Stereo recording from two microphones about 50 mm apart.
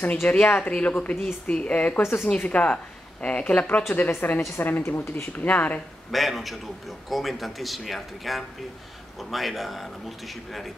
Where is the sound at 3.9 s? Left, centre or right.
Left.